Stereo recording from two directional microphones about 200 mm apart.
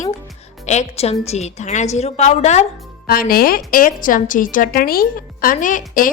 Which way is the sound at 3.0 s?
45° left (ahead or behind).